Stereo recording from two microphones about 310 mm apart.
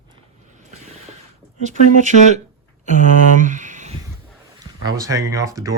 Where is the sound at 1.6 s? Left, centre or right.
Right.